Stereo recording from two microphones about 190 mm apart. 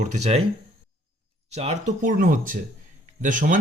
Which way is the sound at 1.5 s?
35° right (ahead or behind).